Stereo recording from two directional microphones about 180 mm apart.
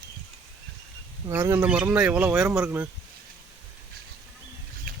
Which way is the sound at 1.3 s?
15° right (ahead or behind).